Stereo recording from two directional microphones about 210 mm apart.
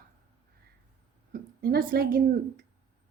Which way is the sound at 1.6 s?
45° right (ahead or behind).